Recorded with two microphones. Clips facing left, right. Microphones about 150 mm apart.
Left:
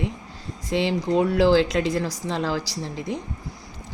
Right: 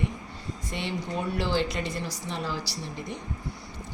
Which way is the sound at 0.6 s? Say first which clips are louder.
Left 11 dB; 90° left.